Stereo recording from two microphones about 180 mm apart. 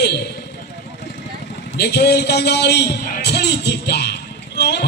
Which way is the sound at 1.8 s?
65° left (ahead or behind).